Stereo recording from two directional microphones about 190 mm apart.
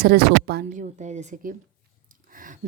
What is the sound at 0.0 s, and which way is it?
Speech, 60° right (ahead or behind).